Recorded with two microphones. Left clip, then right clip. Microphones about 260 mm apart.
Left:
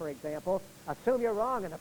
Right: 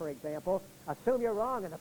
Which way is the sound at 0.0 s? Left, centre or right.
Left.